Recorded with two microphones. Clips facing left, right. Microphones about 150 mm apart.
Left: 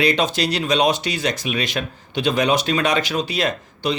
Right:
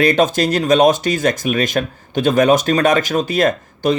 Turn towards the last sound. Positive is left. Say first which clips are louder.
# right 6 dB
turn(degrees=-50)  # may be behind; listen again after turning